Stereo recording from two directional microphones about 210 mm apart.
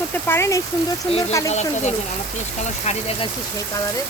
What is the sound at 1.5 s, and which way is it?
Speech, 30° left (ahead or behind).